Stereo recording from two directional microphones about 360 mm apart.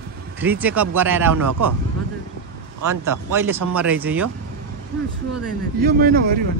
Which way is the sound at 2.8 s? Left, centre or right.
Right.